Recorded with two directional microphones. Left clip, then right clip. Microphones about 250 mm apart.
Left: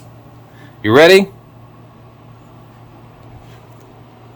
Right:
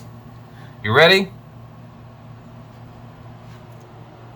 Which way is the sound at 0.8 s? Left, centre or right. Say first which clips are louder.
Left 5 dB; left.